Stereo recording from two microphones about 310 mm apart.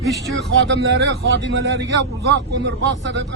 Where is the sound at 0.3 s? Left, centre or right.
Right.